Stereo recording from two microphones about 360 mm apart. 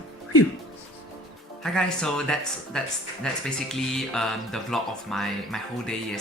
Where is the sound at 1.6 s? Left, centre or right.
Centre.